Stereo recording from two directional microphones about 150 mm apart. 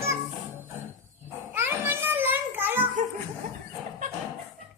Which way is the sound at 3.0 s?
60° right (ahead or behind).